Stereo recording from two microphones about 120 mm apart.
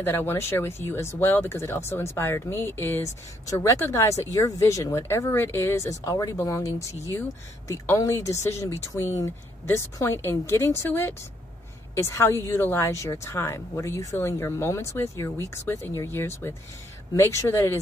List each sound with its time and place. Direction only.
0.0 s speech: 20° left (ahead or behind)